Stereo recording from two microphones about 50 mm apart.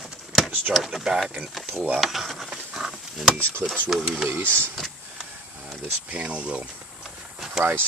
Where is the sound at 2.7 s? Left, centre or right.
Centre.